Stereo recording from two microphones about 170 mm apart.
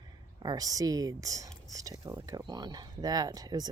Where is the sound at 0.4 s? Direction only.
20° right (ahead or behind).